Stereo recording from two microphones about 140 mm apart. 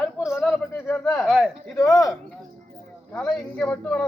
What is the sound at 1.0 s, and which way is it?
Speech, centre (ahead or behind).